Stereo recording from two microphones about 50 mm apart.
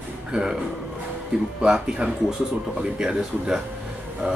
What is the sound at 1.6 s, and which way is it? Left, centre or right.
Speech, centre.